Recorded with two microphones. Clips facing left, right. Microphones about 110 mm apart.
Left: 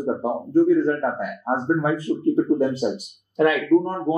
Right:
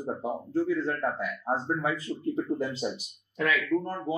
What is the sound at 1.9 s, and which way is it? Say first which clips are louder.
Speech: left 10 dB; 45° left (ahead or behind).